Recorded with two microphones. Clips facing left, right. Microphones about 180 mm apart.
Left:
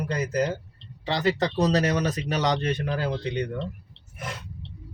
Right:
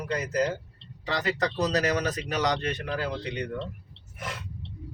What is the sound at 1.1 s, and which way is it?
Speech, 30° left (ahead or behind).